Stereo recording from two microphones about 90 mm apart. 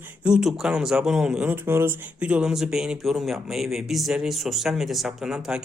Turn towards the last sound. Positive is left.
turn(degrees=-5)  # may be behind; listen again after turning